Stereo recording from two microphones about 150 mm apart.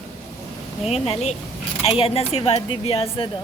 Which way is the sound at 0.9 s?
45° left (ahead or behind).